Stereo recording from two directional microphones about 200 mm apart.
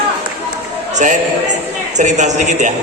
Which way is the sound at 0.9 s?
35° right (ahead or behind).